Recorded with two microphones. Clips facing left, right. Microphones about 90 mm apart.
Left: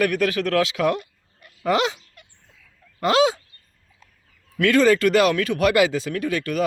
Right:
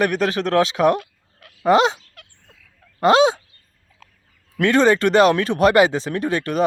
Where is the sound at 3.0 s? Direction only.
25° right (ahead or behind).